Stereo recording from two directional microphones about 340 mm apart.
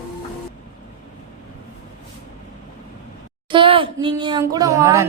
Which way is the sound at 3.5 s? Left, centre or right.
Centre.